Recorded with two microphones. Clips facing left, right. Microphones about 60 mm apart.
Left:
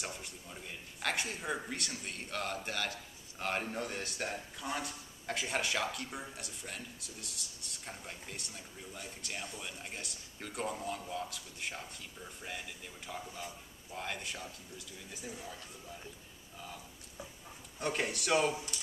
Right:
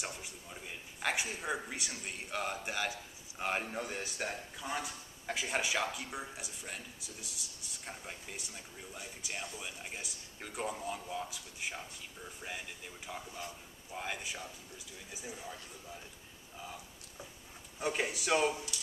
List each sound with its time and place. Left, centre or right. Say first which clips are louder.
0.0 s a man's voice: even; centre
16.5 s a sound: right 1 dB; centre
17.7 s a man's voice: even; centre